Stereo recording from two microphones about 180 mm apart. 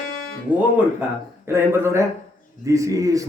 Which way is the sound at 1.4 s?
15° right (ahead or behind).